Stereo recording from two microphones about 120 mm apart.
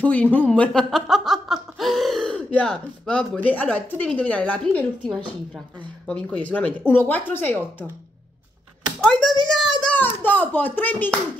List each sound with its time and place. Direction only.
0.0 s speech: 10° left (ahead or behind)
6.0 s speech: 10° left (ahead or behind)
9.0 s a child's voice: 5° left (ahead or behind)
9.9 s speech: 15° left (ahead or behind)